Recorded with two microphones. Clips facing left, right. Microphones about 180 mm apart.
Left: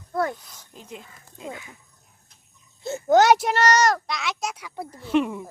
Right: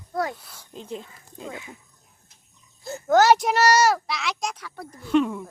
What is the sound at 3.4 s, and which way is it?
Speech, 5° right (ahead or behind).